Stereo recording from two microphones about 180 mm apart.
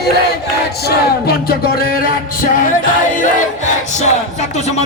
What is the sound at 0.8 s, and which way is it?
A man's voice, 60° left (ahead or behind).